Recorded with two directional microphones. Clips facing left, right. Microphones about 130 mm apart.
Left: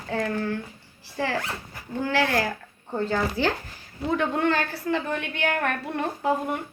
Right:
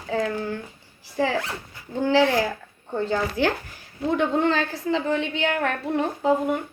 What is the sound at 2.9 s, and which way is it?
Speech, centre (ahead or behind).